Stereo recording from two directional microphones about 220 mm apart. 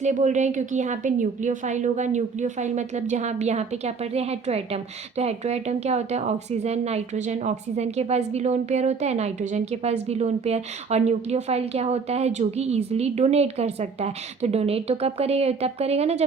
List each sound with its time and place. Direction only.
0.0 s a woman's voice: 35° right (ahead or behind)